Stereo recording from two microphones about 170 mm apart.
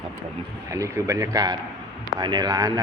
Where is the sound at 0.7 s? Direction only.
15° right (ahead or behind).